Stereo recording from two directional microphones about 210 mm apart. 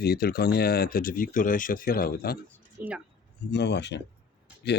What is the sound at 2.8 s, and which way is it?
Speech, 45° right (ahead or behind).